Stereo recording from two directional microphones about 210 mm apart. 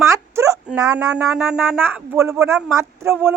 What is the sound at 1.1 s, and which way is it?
Speech, 5° right (ahead or behind).